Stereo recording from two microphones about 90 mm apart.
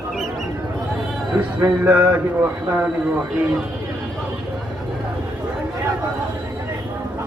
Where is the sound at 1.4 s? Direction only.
20° right (ahead or behind).